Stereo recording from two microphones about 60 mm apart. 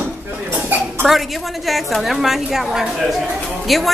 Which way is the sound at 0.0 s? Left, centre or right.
Right.